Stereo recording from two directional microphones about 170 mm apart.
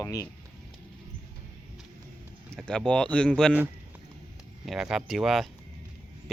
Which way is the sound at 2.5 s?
5° left (ahead or behind).